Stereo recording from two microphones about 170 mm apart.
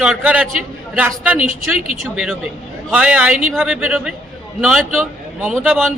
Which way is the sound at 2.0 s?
Centre (ahead or behind).